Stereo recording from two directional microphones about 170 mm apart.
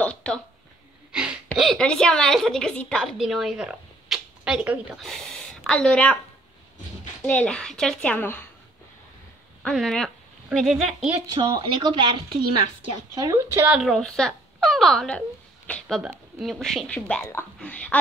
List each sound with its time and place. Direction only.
0.0 s a sound: 5° left (ahead or behind)
1.1 s a woman's voice: 5° right (ahead or behind)
7.2 s speech: 5° left (ahead or behind)
9.6 s speech: centre (ahead or behind)
11.3 s speech: 25° right (ahead or behind)
13.7 s speech: centre (ahead or behind)
16.0 s speech: 5° right (ahead or behind)